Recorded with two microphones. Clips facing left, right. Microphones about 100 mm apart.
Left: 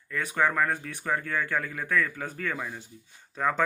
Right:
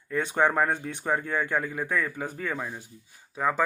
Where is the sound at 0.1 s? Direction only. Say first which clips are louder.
Right 2 dB; 25° right (ahead or behind).